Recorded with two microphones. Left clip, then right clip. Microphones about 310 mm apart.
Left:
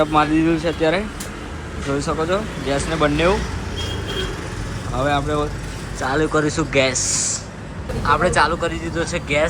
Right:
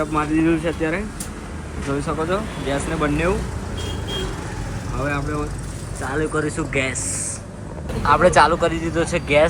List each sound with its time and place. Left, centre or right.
0.0 s speech: centre
5.0 s speech: centre